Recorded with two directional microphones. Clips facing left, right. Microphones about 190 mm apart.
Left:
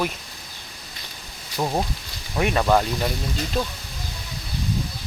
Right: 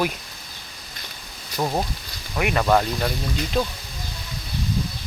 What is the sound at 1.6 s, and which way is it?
Speech, 5° left (ahead or behind).